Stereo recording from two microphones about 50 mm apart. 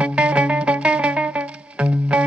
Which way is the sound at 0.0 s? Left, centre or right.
Right.